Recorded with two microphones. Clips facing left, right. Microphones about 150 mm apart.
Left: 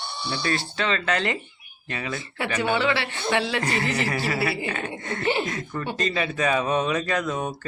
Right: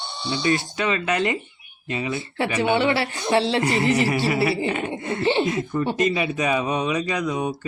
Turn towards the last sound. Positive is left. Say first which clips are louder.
# right 2 dB
turn(degrees=-10)  # may be behind; listen again after turning